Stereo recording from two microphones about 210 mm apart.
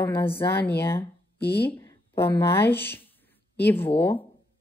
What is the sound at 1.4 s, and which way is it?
Speech, 50° left (ahead or behind).